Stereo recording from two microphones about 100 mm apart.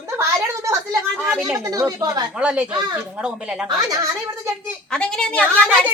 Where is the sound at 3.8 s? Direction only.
35° right (ahead or behind).